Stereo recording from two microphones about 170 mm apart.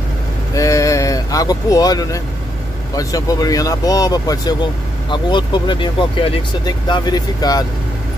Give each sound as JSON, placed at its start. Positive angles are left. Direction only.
{"t": 0.6, "sound": "vehicle", "side_deg": 20}
{"t": 3.0, "sound": "speech", "side_deg": 20}